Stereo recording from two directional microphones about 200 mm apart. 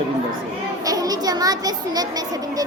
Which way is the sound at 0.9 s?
20° right (ahead or behind).